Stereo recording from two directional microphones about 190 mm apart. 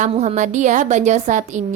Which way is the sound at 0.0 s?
35° right (ahead or behind).